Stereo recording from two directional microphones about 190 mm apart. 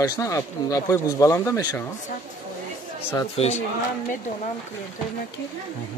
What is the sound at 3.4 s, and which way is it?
Speech, 30° left (ahead or behind).